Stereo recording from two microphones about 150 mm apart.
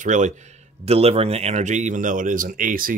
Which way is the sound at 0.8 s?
40° right (ahead or behind).